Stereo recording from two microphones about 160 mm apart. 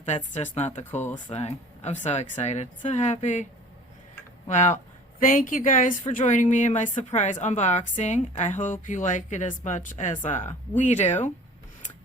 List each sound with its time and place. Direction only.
0.0 s speech: 50° left (ahead or behind)
4.4 s speech: 50° left (ahead or behind)